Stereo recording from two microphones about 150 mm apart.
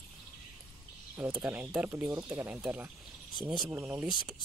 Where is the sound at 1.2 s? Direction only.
10° right (ahead or behind).